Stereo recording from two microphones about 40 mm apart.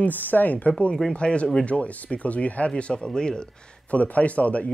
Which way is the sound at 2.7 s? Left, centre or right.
Left.